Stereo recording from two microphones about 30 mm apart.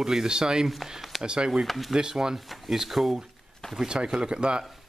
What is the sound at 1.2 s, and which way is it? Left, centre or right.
Speech, right.